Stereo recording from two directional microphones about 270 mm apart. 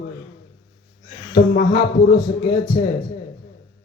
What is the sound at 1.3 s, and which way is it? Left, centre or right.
Speech, left.